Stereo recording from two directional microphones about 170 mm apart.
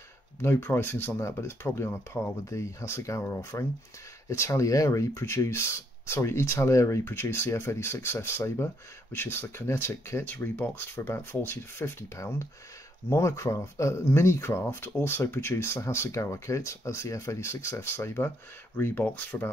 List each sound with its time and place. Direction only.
0.4 s speech: 15° left (ahead or behind)